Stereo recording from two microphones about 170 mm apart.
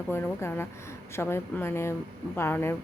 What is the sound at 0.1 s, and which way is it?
Speech, 15° left (ahead or behind).